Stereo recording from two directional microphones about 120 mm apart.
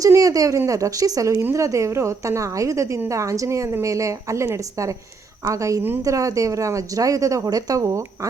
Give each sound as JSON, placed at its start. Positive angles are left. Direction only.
{"t": 0.0, "sound": "a woman's voice", "side_deg": -30}